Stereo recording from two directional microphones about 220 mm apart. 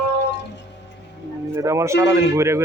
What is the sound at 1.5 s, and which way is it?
Speech, 15° right (ahead or behind).